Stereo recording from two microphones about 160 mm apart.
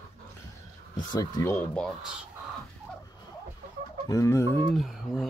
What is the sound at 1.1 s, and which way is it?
Speech, 20° left (ahead or behind).